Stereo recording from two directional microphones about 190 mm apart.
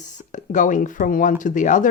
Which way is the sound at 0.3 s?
40° left (ahead or behind).